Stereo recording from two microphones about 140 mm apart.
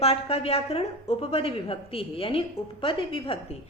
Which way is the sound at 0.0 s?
45° left (ahead or behind).